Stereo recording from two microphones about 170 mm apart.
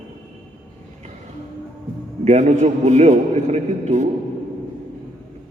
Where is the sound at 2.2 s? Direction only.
40° right (ahead or behind).